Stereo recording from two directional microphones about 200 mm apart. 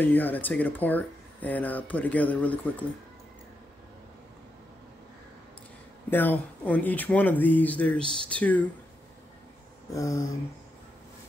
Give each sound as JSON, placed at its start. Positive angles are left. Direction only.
{"t": 0.0, "sound": "speech", "side_deg": 10}
{"t": 6.0, "sound": "speech", "side_deg": 10}
{"t": 9.9, "sound": "speech", "side_deg": 15}